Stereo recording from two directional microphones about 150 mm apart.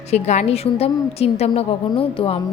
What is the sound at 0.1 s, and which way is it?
A woman's voice, 45° left (ahead or behind).